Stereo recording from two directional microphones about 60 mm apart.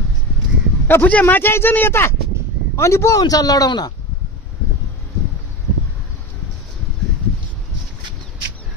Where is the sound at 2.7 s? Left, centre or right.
Left.